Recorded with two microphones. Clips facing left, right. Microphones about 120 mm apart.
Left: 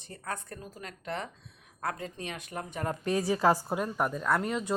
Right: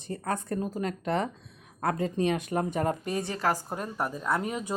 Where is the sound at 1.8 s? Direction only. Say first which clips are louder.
Right 9 dB; 35° right (ahead or behind).